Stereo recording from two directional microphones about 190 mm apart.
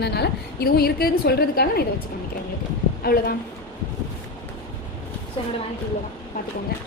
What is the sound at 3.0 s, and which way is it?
Speech, 50° left (ahead or behind).